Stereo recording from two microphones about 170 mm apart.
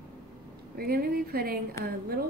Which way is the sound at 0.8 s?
60° right (ahead or behind).